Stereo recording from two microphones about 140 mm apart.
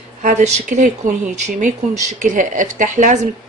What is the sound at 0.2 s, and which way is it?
Speech, 60° right (ahead or behind).